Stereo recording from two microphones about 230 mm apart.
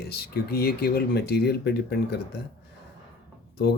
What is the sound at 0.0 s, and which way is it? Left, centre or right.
Speech, left.